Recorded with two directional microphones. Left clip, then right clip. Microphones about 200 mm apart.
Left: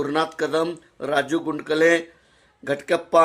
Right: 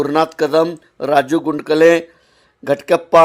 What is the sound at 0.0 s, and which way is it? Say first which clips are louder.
Speech: right 8 dB; 30° right (ahead or behind).